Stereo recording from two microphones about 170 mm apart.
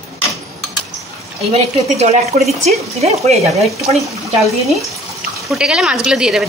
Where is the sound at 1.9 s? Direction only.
40° right (ahead or behind).